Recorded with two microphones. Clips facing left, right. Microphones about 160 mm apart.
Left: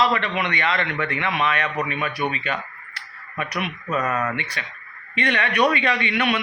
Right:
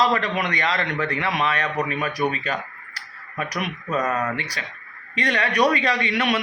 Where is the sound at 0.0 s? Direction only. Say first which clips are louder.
Even; 40° right (ahead or behind).